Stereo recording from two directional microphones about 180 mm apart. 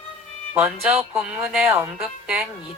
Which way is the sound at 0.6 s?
Centre (ahead or behind).